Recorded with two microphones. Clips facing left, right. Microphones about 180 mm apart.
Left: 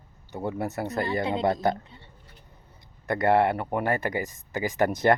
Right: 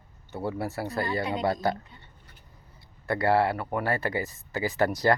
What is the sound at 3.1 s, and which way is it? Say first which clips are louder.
Speech: left 2 dB; 20° left (ahead or behind).